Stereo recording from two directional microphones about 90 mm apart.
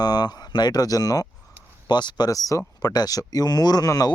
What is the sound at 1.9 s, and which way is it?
Speech, 55° left (ahead or behind).